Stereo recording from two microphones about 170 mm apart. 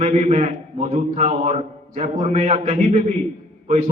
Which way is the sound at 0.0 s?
40° right (ahead or behind).